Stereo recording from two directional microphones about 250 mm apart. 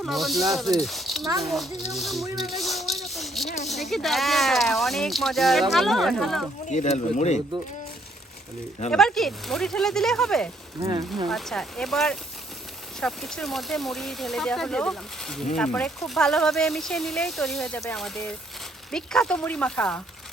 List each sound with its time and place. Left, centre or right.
0.0 s speech: centre
3.0 s a sound: centre
3.7 s speech: centre
6.7 s speech: left
8.9 s speech: centre
10.8 s speech: centre
11.3 s speech: centre